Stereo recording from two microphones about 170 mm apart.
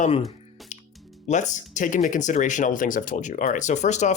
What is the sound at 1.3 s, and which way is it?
Speech, 45° left (ahead or behind).